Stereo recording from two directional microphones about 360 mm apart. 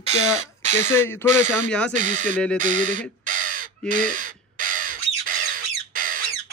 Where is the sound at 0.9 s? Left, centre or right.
Centre.